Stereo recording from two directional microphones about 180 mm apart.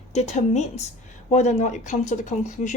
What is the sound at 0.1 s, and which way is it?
Speech, 40° left (ahead or behind).